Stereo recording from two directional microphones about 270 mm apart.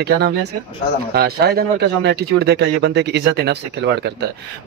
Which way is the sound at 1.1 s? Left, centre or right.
Right.